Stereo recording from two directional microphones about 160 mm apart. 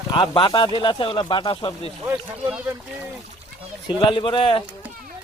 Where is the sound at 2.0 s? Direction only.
10° right (ahead or behind).